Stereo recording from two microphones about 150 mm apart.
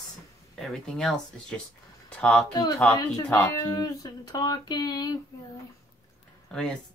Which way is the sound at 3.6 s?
25° left (ahead or behind).